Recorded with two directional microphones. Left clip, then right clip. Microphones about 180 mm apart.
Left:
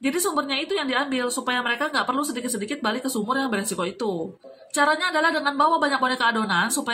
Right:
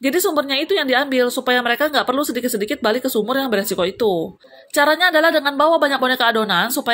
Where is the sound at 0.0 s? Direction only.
45° right (ahead or behind).